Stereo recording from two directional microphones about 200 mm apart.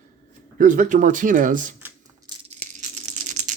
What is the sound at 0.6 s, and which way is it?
Speech, 40° right (ahead or behind).